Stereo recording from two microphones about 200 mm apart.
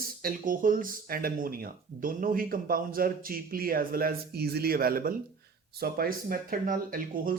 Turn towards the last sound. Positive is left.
turn(degrees=-45)  # may be behind; listen again after turning